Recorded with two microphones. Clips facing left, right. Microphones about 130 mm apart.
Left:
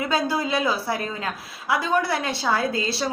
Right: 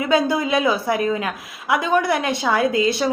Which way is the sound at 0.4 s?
20° right (ahead or behind).